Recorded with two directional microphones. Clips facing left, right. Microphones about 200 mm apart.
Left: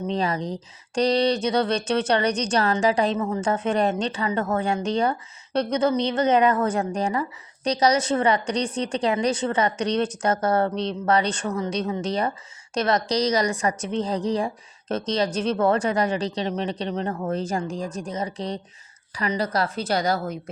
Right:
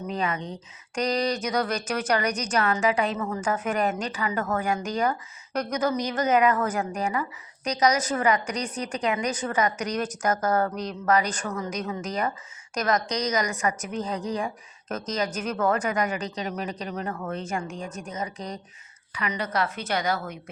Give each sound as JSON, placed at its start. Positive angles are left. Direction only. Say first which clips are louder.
{"t": 0.1, "sound": "a woman's voice", "louder": "left 3 dB", "side_deg": 35}